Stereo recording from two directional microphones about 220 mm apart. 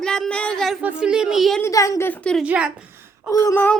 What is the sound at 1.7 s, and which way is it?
Speech, 15° left (ahead or behind).